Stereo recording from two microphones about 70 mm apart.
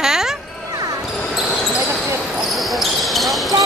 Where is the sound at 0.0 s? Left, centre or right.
Centre.